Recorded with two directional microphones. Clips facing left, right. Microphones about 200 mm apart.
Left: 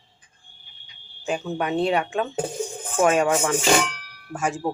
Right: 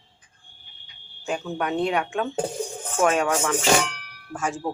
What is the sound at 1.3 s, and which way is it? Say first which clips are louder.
Speech: left 1 dB; 5° left (ahead or behind).